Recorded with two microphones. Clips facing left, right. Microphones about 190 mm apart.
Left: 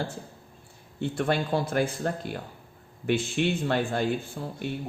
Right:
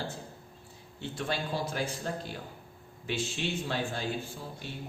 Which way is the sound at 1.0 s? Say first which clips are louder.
Left 7 dB; 55° left (ahead or behind).